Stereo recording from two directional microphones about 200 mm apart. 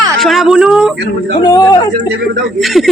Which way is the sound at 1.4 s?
20° left (ahead or behind).